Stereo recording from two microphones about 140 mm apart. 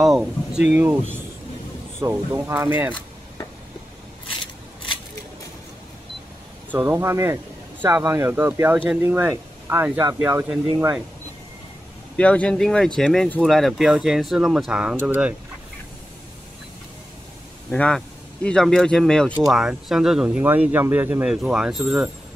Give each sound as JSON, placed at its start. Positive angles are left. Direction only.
{"t": 0.0, "sound": "speech", "side_deg": -5}
{"t": 0.7, "sound": "speech", "side_deg": -15}
{"t": 6.7, "sound": "speech", "side_deg": -15}
{"t": 12.2, "sound": "speech", "side_deg": 10}
{"t": 17.6, "sound": "speech", "side_deg": 5}